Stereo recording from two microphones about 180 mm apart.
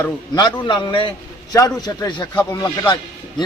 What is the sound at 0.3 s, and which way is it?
A man's voice, 25° left (ahead or behind).